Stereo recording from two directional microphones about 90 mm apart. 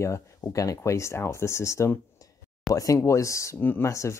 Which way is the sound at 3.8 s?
35° left (ahead or behind).